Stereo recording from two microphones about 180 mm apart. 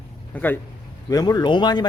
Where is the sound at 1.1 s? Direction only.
20° left (ahead or behind).